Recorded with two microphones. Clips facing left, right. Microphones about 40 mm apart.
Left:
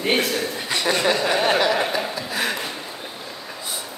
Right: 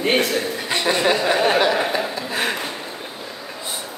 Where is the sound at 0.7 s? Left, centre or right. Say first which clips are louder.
Right 1 dB; right.